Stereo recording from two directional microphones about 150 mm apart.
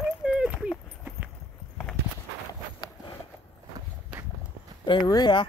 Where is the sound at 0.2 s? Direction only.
5° right (ahead or behind).